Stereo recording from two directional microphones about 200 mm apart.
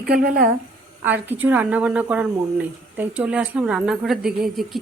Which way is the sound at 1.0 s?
10° right (ahead or behind).